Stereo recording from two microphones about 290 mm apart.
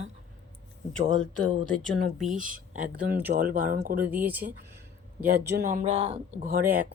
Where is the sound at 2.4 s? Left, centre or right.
Right.